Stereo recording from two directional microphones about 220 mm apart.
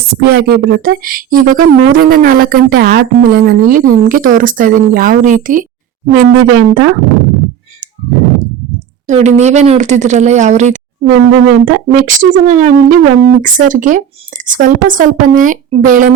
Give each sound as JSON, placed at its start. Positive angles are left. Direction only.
{"t": 0.2, "sound": "speech", "side_deg": -45}
{"t": 6.1, "sound": "speech", "side_deg": -50}
{"t": 9.0, "sound": "speech", "side_deg": -30}
{"t": 11.1, "sound": "speech", "side_deg": -55}
{"t": 11.6, "sound": "speech", "side_deg": -40}